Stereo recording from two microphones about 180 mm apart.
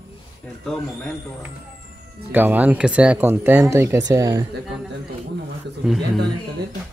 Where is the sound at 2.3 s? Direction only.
10° right (ahead or behind).